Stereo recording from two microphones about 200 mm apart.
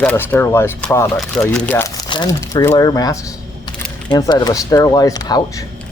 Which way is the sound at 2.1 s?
20° left (ahead or behind).